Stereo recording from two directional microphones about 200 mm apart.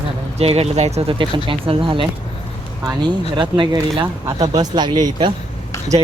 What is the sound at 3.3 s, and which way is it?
Speech, 25° right (ahead or behind).